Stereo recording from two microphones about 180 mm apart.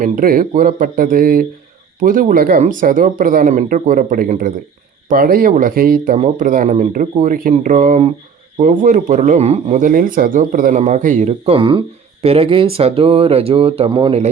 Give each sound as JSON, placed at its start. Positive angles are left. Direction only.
{"t": 0.0, "sound": "speech", "side_deg": -50}
{"t": 6.1, "sound": "speech", "side_deg": -40}